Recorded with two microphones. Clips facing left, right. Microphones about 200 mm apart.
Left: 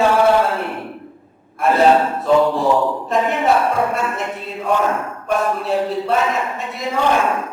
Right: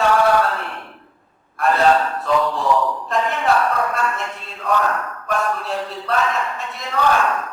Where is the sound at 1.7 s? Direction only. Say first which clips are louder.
Left 3 dB; 20° left (ahead or behind).